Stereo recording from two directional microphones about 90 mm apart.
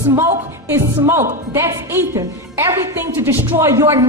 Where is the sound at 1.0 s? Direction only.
30° right (ahead or behind).